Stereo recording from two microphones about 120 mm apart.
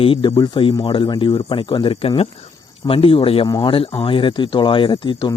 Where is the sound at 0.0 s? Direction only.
45° left (ahead or behind).